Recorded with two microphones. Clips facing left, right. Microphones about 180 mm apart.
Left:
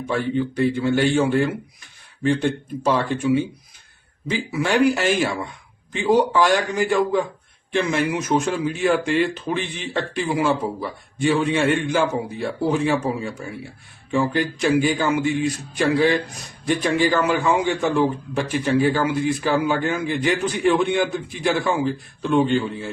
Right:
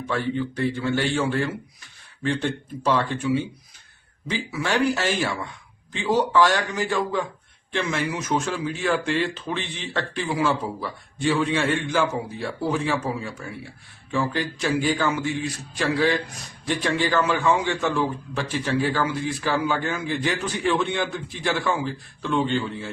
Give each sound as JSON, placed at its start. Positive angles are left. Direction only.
{"t": 0.3, "sound": "speech", "side_deg": 15}